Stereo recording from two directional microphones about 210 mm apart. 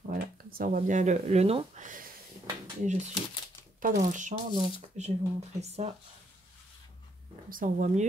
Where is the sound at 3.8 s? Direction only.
40° right (ahead or behind).